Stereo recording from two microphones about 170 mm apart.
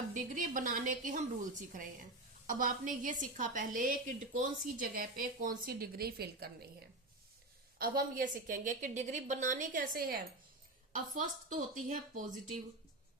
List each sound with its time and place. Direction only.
0.1 s a woman's voice: 50° right (ahead or behind)
7.8 s a woman's voice: 55° right (ahead or behind)